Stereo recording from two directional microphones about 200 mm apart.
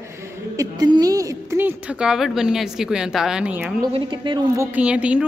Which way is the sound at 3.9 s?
25° right (ahead or behind).